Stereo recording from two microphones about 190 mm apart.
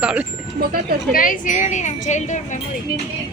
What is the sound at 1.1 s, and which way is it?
A woman's voice, 45° left (ahead or behind).